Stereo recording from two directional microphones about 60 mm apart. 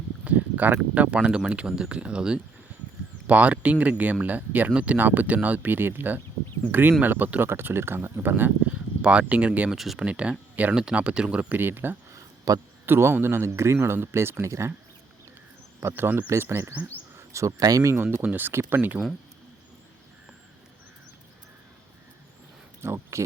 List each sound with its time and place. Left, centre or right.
0.3 s speech: right
4.9 s speech: right
8.2 s speech: right
9.0 s speech: centre
9.7 s speech: centre
10.0 s speech: centre
11.5 s speech: right
12.5 s a man's voice: right
12.8 s speech: right
15.8 s speech: right
16.2 s speech: right
17.2 s speech: right
17.9 s speech: right
22.8 s speech: right